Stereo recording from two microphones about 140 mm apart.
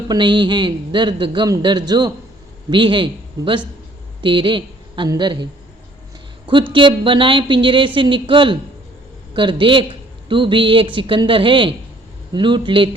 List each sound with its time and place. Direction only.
0.1 s a man's voice: 35° right (ahead or behind)
6.5 s a man's voice: 35° right (ahead or behind)